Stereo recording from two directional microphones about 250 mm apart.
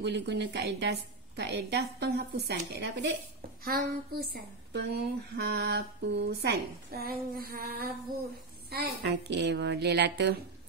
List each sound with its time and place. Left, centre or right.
0.0 s a woman's voice: right